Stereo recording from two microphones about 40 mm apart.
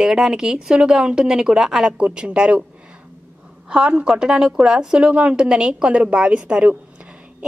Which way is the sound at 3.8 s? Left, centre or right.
Right.